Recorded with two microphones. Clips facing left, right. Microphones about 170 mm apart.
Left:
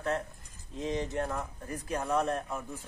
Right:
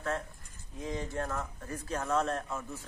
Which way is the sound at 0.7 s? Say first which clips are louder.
Left 3 dB; 20° left (ahead or behind).